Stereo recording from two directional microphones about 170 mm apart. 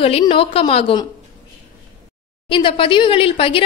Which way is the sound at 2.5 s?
30° left (ahead or behind).